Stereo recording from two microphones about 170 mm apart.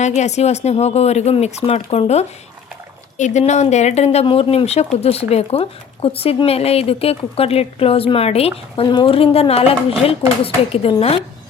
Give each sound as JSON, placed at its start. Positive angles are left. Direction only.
{"t": 0.0, "sound": "speech", "side_deg": 40}